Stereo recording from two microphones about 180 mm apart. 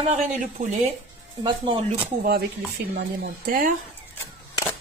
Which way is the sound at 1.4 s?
25° right (ahead or behind).